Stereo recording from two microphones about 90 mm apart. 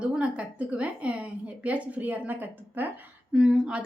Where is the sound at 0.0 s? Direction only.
10° right (ahead or behind).